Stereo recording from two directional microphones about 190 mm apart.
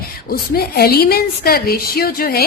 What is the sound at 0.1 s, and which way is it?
A woman's voice, 50° left (ahead or behind).